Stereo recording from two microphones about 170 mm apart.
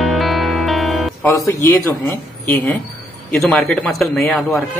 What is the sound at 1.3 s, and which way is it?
Speech, 15° left (ahead or behind).